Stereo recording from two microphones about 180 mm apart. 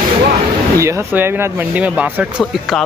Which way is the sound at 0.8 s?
15° right (ahead or behind).